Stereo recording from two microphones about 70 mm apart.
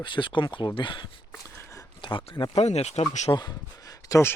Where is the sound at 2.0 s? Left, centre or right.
Left.